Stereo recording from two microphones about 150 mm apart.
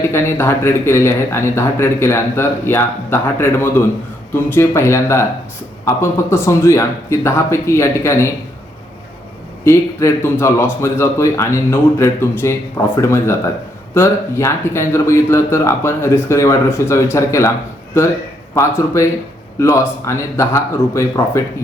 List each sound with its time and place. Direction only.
0.1 s speech: 15° left (ahead or behind)
9.6 s speech: 15° left (ahead or behind)